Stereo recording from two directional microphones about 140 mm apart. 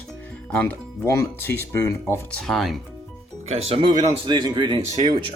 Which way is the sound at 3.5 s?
45° right (ahead or behind).